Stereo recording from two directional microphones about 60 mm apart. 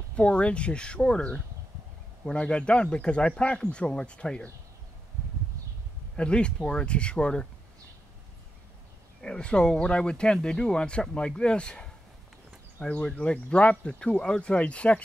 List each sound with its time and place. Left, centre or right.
0.1 s speech: centre
6.1 s speech: centre
9.2 s speech: centre